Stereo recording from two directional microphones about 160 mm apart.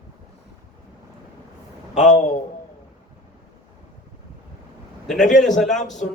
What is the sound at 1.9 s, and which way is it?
Speech, 50° left (ahead or behind).